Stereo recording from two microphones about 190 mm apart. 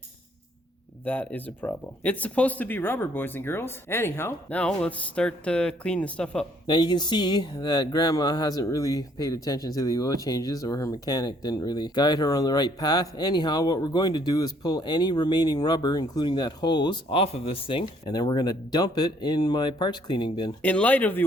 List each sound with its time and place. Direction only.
1.0 s speech: 10° left (ahead or behind)
6.7 s speech: 25° left (ahead or behind)
20.6 s speech: 10° left (ahead or behind)